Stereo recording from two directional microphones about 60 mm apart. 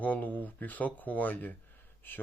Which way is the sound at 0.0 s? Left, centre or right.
Left.